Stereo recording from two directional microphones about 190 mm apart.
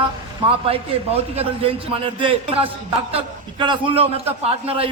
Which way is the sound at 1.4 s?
30° right (ahead or behind).